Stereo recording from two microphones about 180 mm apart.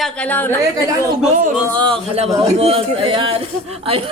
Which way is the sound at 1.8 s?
30° right (ahead or behind).